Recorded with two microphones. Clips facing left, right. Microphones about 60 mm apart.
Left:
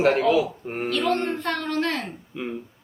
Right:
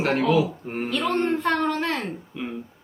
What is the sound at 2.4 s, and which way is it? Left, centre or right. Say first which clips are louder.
Speech: left 2 dB; centre.